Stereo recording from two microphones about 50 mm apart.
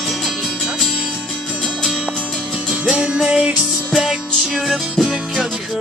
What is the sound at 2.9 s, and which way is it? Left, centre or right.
Music, centre.